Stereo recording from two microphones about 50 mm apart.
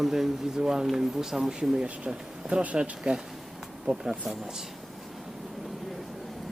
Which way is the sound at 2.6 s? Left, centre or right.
Right.